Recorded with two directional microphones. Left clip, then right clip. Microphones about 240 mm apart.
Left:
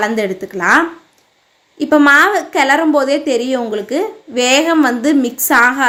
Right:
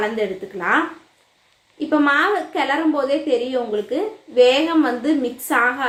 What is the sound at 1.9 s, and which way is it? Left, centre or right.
A woman's voice, left.